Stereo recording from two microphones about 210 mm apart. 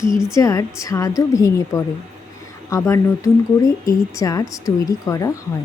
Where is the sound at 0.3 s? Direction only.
15° left (ahead or behind).